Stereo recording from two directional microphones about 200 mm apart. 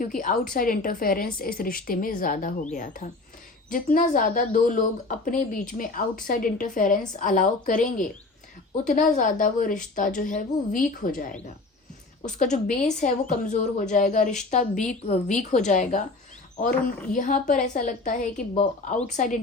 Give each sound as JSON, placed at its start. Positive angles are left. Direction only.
{"t": 0.2, "sound": "a woman's voice", "side_deg": 40}
{"t": 12.2, "sound": "a woman's voice", "side_deg": 40}
{"t": 17.1, "sound": "a woman's voice", "side_deg": 40}